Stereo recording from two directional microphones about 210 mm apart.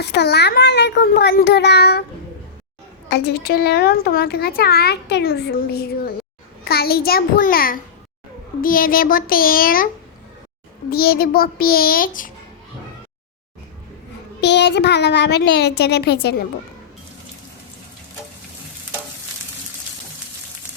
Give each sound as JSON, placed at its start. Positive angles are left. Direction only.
{"t": 0.0, "sound": "a woman's voice", "side_deg": 55}
{"t": 3.1, "sound": "a woman's voice", "side_deg": 50}
{"t": 10.9, "sound": "a woman's voice", "side_deg": 45}
{"t": 14.4, "sound": "a woman's voice", "side_deg": 55}